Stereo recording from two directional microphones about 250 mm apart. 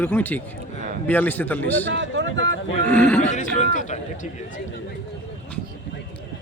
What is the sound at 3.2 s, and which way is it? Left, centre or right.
A man's voice, left.